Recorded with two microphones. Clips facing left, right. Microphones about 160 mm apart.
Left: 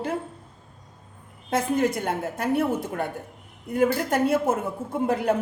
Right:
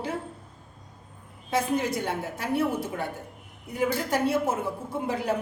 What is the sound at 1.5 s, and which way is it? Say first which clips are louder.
A woman's voice: left 3 dB; 50° left (ahead or behind).